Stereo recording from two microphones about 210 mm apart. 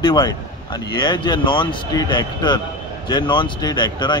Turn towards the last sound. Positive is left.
turn(degrees=20)  # may be behind; listen again after turning